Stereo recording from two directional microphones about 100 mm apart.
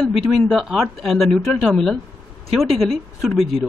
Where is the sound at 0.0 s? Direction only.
10° left (ahead or behind).